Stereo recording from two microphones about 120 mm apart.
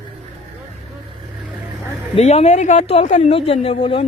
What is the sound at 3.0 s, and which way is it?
Speech, 90° left.